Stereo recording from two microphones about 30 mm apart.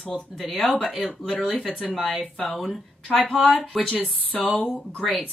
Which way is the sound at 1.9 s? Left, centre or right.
Centre.